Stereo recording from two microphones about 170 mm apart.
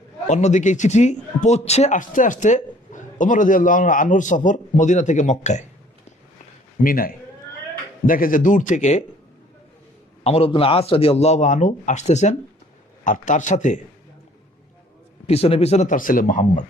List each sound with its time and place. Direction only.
0.3 s a man's voice: 45° left (ahead or behind)
6.8 s a man's voice: 55° left (ahead or behind)
10.2 s a man's voice: 35° left (ahead or behind)
15.3 s a man's voice: 35° left (ahead or behind)